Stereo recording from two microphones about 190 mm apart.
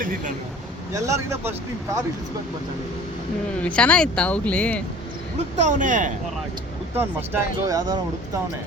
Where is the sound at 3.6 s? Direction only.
5° left (ahead or behind).